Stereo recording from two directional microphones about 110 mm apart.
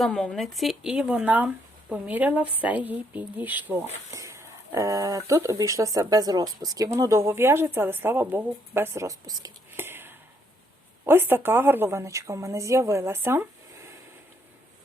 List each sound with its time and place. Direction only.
0.0 s speech: 5° left (ahead or behind); by 3.8 s 15° right (ahead or behind)
4.1 s speech: 25° right (ahead or behind)
9.7 s a sound: 20° right (ahead or behind)
11.0 s speech: 20° right (ahead or behind)